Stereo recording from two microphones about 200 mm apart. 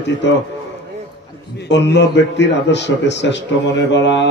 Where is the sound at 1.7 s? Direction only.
60° left (ahead or behind).